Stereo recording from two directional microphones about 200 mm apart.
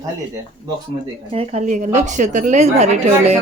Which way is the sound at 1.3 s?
30° right (ahead or behind).